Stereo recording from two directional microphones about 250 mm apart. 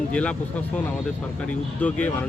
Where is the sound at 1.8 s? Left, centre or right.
Centre.